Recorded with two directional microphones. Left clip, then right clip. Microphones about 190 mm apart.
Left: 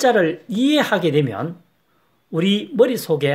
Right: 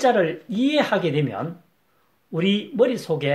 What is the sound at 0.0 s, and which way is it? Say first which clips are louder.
Speech: left 3 dB; 40° left (ahead or behind).